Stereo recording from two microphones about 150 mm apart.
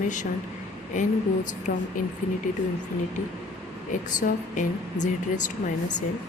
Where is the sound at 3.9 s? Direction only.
60° left (ahead or behind).